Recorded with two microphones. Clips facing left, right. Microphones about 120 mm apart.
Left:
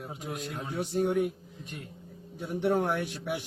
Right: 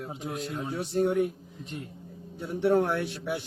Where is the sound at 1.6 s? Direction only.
25° right (ahead or behind).